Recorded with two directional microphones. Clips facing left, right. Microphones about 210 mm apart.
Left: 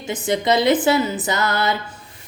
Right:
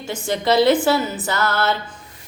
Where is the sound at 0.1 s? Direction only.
20° left (ahead or behind).